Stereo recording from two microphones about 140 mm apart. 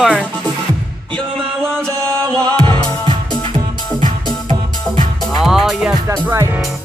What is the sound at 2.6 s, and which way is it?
Music, 35° right (ahead or behind).